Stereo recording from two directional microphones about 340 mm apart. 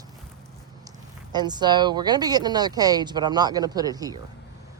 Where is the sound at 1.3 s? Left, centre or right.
Centre.